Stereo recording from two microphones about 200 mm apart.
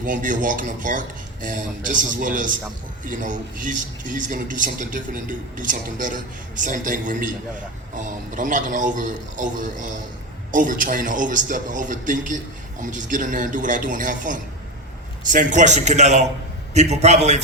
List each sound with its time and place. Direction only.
0.0 s a man's voice: 40° right (ahead or behind)